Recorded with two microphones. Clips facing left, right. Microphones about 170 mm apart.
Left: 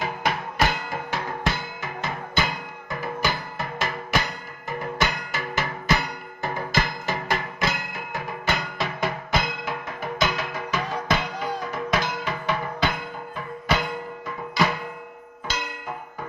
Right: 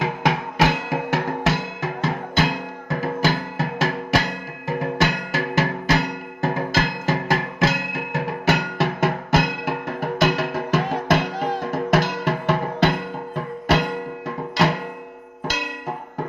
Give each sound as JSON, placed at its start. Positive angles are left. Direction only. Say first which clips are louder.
{"t": 0.0, "sound": "music", "louder": "right 5 dB", "side_deg": -90}